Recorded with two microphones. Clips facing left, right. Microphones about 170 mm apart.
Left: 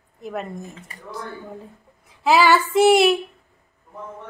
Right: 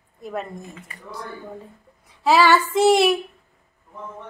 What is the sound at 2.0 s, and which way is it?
Child singing, centre (ahead or behind).